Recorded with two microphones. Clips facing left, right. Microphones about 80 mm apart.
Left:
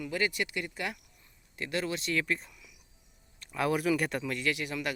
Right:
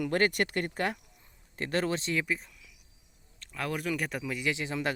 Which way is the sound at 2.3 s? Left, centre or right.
Centre.